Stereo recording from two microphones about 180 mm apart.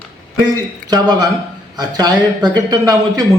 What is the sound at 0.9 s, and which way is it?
A man's voice, 20° right (ahead or behind).